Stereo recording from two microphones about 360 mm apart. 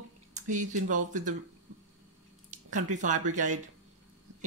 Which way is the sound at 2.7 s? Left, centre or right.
Right.